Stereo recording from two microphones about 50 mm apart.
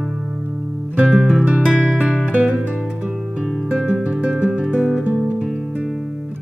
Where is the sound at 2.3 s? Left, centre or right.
Right.